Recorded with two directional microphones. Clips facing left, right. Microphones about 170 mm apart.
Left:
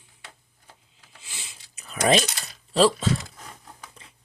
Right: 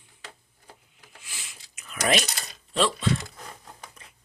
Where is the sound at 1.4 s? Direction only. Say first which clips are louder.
Left 1 dB; 35° left (ahead or behind).